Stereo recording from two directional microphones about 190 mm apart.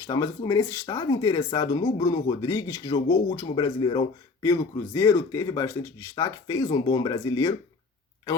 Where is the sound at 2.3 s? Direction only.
15° left (ahead or behind).